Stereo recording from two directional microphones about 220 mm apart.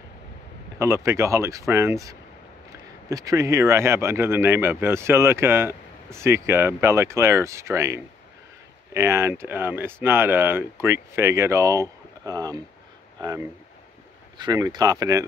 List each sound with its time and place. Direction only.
0.7 s speech: 15° right (ahead or behind)